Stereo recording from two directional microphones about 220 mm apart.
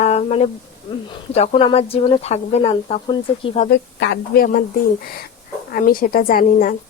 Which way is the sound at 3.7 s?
50° left (ahead or behind).